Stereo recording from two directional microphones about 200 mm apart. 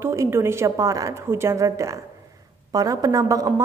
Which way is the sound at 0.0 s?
15° right (ahead or behind).